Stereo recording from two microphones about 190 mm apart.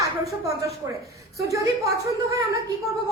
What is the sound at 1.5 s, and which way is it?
Speech, 15° right (ahead or behind).